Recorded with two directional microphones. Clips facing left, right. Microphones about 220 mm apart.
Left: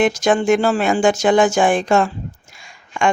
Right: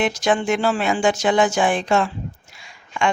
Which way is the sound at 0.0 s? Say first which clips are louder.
Left 4 dB; 45° left (ahead or behind).